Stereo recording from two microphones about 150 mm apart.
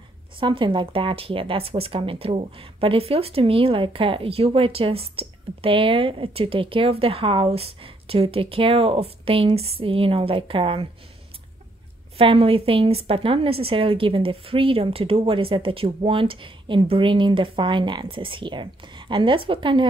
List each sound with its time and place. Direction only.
0.4 s speech: 35° right (ahead or behind)
12.2 s speech: 40° right (ahead or behind)